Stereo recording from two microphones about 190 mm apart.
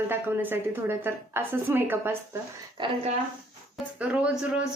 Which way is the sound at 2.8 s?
25° right (ahead or behind).